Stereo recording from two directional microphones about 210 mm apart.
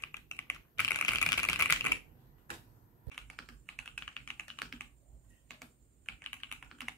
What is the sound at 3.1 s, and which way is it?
Computer keyboard, centre (ahead or behind).